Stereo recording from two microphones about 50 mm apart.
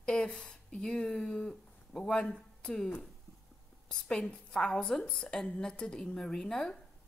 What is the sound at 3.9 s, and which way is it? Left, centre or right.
A woman's voice, centre.